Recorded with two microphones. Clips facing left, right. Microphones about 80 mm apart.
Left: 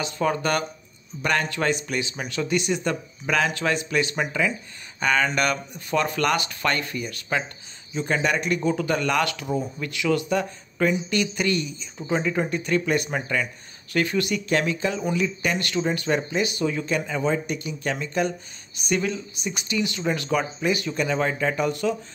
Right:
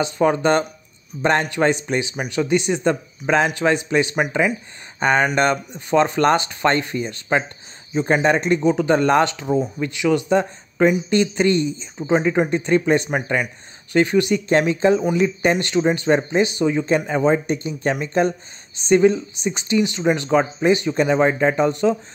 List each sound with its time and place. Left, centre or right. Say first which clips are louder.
0.0 s speech: right 7 dB; right
8.5 s speech: right 7 dB; centre